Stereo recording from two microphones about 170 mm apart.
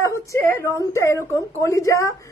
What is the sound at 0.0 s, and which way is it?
A woman's voice, 15° left (ahead or behind).